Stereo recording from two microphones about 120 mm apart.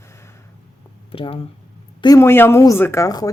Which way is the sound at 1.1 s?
50° left (ahead or behind).